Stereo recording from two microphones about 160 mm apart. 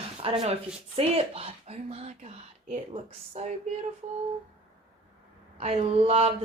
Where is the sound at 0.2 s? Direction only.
35° right (ahead or behind).